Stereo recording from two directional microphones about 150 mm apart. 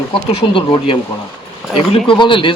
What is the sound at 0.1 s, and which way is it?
Speech, 40° left (ahead or behind).